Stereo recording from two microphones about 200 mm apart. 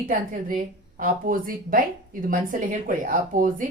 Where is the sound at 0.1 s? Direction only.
45° right (ahead or behind).